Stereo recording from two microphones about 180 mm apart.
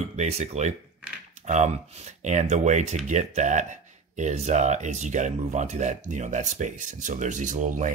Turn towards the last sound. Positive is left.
turn(degrees=-45)  # may be behind; listen again after turning